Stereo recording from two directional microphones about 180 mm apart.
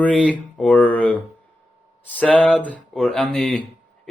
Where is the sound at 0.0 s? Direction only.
5° left (ahead or behind).